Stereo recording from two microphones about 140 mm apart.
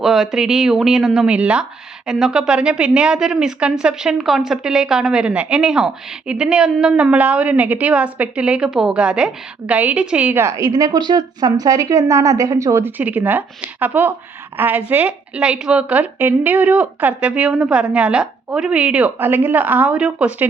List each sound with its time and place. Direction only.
0.0 s a woman's voice: centre (ahead or behind)